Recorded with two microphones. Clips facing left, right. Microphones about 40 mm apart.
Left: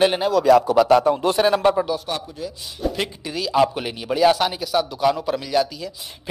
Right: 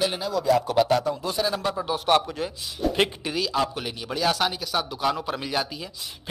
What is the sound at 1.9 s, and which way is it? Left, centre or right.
Speech, right.